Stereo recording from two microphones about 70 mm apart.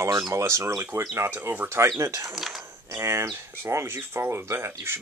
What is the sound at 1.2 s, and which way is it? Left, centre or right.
Speech, right.